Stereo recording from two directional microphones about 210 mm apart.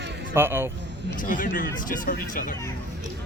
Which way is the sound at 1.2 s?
40° left (ahead or behind).